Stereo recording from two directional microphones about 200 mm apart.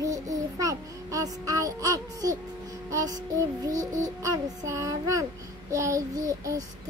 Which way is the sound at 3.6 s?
15° right (ahead or behind).